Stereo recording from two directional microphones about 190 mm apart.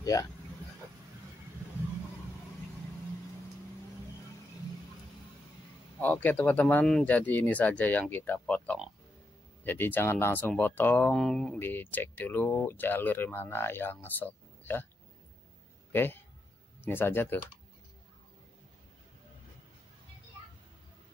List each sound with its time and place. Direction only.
0.0 s speech: 20° left (ahead or behind)
5.9 s speech: 10° left (ahead or behind)
15.9 s speech: 10° left (ahead or behind)